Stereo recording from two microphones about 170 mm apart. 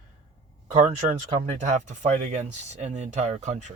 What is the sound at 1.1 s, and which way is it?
Speech, 45° right (ahead or behind).